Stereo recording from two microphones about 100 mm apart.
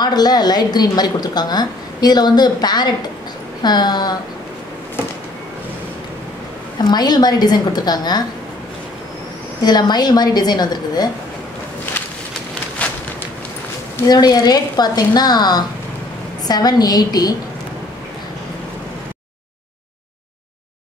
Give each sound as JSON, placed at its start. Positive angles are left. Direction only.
{"t": 0.0, "sound": "a woman's voice", "side_deg": 45}
{"t": 6.9, "sound": "a woman's voice", "side_deg": 45}
{"t": 9.6, "sound": "a woman's voice", "side_deg": 45}
{"t": 14.0, "sound": "a woman's voice", "side_deg": 40}